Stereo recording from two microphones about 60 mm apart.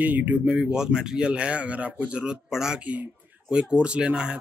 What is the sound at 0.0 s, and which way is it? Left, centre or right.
Speech, right.